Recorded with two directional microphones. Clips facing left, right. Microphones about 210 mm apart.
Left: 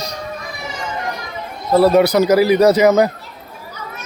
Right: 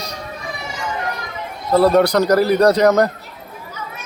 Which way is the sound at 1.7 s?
5° left (ahead or behind).